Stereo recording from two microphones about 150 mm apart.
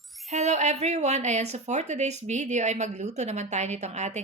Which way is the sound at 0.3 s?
50° right (ahead or behind).